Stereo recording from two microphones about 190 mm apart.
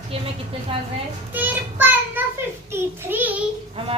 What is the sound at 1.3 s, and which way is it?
Child singing, 10° right (ahead or behind).